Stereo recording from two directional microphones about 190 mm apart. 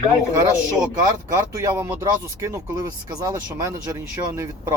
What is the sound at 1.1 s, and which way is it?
Speech, 15° right (ahead or behind).